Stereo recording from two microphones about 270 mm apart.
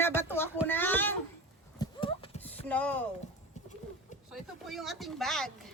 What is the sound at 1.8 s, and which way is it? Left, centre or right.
Clip-clop, centre.